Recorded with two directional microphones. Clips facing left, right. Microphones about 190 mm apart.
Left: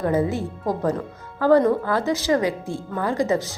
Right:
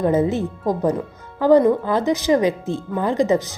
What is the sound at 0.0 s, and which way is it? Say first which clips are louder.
Speech: right 4 dB; 20° right (ahead or behind).